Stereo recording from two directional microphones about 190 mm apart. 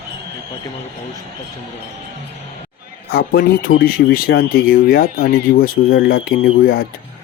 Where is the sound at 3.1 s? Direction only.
50° left (ahead or behind).